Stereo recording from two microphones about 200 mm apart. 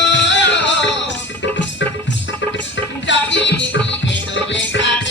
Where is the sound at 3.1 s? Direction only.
65° left (ahead or behind).